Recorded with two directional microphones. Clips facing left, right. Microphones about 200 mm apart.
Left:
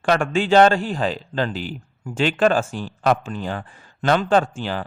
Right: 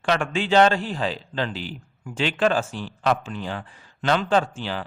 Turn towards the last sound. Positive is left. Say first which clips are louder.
# left 3 dB
turn(degrees=50)  # may be behind; listen again after turning